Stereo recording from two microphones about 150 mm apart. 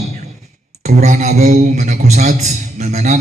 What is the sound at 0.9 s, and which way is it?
Speech, 50° right (ahead or behind).